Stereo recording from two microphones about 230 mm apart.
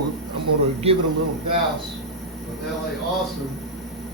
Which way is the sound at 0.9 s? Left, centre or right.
Right.